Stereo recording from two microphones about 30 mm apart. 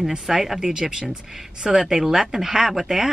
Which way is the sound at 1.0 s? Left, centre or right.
Centre.